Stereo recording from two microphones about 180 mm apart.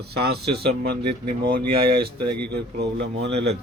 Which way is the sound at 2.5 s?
70° right (ahead or behind).